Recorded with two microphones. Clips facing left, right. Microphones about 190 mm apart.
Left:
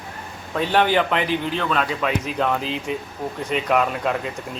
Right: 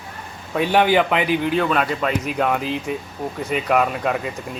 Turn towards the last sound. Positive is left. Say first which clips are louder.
# right 1 dB
turn(degrees=0)  # may be behind; listen again after turning